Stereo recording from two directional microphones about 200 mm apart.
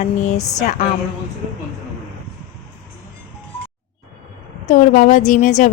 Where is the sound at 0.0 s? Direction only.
35° left (ahead or behind).